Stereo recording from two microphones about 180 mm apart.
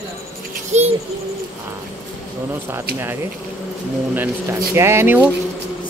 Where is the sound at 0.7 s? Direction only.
40° right (ahead or behind).